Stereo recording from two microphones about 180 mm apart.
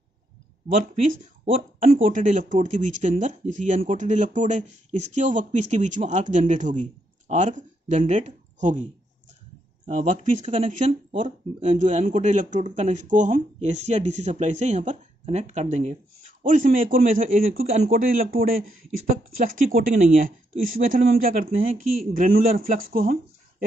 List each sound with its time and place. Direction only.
1.4 s speech: 50° right (ahead or behind)
9.8 s speech: 45° right (ahead or behind)